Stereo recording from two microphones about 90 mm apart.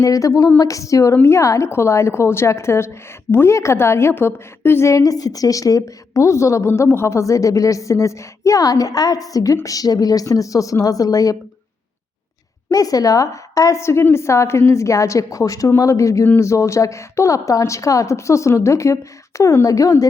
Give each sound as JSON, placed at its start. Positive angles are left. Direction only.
{"t": 0.0, "sound": "a woman's voice", "side_deg": 35}
{"t": 12.7, "sound": "a woman's voice", "side_deg": 40}